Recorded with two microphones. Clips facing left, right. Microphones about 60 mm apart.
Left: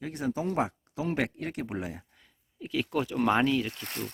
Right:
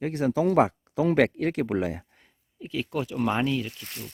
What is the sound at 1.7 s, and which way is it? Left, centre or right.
Speech, right.